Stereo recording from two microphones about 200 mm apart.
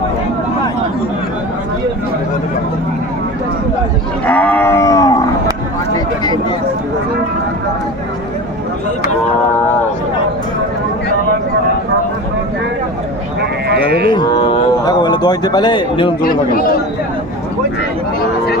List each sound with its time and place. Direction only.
4.3 s wild animals: 5° left (ahead or behind)
13.7 s speech: 55° right (ahead or behind)
14.1 s a man's voice: 20° left (ahead or behind)
16.2 s speech: 45° left (ahead or behind)